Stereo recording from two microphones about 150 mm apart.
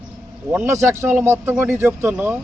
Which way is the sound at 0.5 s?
15° right (ahead or behind).